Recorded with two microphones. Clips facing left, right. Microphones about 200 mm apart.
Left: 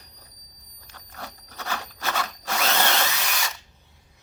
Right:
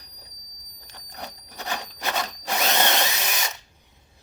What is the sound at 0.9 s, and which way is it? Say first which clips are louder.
Drill: right 1 dB; 20° right (ahead or behind).